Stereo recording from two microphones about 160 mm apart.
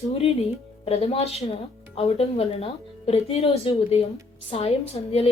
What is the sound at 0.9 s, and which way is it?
A woman's voice, 40° left (ahead or behind).